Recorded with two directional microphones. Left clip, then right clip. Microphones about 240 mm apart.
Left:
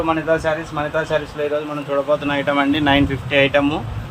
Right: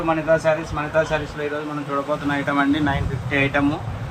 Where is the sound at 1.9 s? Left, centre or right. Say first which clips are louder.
Left 5 dB; left.